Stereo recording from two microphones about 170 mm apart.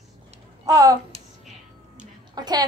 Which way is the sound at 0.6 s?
20° right (ahead or behind).